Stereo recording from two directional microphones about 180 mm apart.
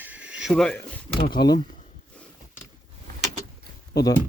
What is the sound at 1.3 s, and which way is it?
Speech, 25° left (ahead or behind).